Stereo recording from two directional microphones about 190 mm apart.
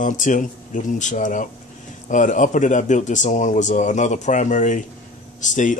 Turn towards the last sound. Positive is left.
turn(degrees=40)  # may be behind; listen again after turning